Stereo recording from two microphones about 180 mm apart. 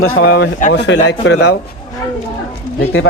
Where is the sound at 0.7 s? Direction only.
75° left (ahead or behind).